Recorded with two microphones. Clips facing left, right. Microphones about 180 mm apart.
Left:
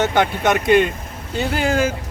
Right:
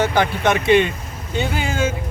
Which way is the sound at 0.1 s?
Centre (ahead or behind).